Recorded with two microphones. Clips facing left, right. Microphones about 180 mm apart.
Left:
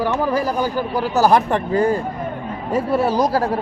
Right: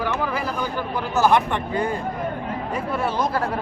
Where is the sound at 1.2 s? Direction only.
40° left (ahead or behind).